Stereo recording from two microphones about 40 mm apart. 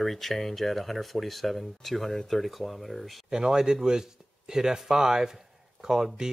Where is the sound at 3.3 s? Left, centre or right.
Centre.